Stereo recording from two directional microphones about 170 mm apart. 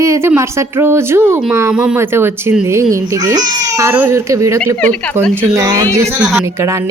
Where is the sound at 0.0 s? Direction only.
15° right (ahead or behind).